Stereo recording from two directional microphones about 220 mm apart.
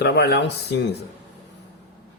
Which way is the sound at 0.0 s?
50° left (ahead or behind).